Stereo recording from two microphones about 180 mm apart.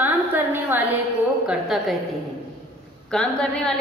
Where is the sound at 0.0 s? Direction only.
10° right (ahead or behind).